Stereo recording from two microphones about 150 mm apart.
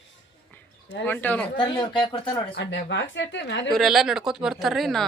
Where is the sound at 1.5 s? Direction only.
30° left (ahead or behind).